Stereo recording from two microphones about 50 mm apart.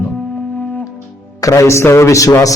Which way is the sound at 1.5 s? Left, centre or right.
Left.